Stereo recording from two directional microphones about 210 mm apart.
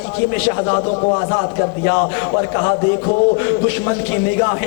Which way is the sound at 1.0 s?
25° left (ahead or behind).